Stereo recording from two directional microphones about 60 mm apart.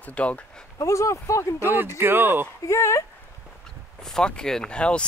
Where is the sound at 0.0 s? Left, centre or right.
Left.